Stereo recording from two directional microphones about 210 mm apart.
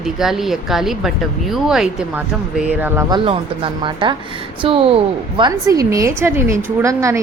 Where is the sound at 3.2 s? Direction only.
25° right (ahead or behind).